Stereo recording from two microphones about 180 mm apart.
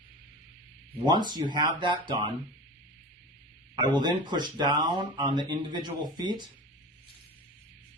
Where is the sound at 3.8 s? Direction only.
25° right (ahead or behind).